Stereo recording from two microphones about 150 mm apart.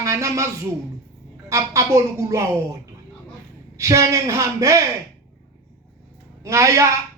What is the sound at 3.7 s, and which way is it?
Speech, 20° right (ahead or behind).